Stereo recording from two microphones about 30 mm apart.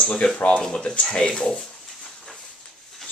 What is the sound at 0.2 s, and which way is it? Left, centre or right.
Speech, left.